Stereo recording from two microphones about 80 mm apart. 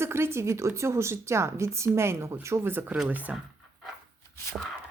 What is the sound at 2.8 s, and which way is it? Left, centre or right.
Speech, centre.